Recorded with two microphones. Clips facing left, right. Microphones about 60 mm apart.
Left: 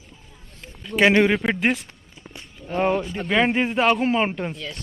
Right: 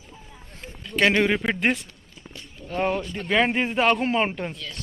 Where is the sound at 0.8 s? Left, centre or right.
Centre.